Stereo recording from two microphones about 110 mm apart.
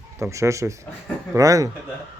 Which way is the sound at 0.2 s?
25° right (ahead or behind).